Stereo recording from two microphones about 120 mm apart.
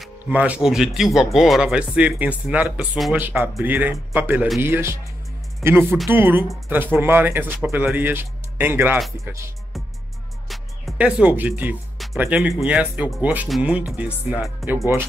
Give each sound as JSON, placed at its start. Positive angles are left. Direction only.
{"t": 0.3, "sound": "speech", "side_deg": -10}
{"t": 11.0, "sound": "speech", "side_deg": -10}
{"t": 12.0, "sound": "music", "side_deg": 0}
{"t": 12.6, "sound": "speech", "side_deg": -10}
{"t": 14.6, "sound": "speech", "side_deg": 0}